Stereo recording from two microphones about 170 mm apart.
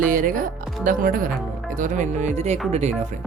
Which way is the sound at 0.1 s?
55° right (ahead or behind).